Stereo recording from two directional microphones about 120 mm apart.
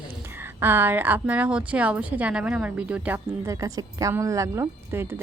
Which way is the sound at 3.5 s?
30° right (ahead or behind).